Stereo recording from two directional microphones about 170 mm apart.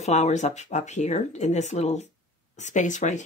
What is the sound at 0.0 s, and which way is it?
Speech, 45° left (ahead or behind).